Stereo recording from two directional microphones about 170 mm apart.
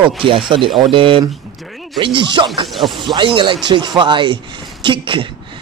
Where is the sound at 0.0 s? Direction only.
30° right (ahead or behind).